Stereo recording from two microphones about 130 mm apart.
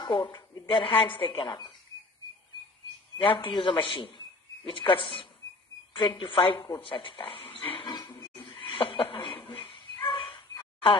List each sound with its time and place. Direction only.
0.0 s a woman's voice: 35° left (ahead or behind)
3.3 s a woman's voice: 40° left (ahead or behind)